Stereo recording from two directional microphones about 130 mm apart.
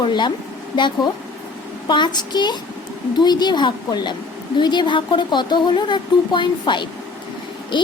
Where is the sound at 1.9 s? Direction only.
35° left (ahead or behind).